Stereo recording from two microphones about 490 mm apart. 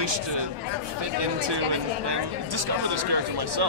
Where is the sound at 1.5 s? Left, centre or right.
Right.